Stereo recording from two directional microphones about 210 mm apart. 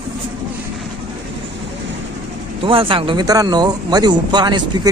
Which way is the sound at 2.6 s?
25° right (ahead or behind).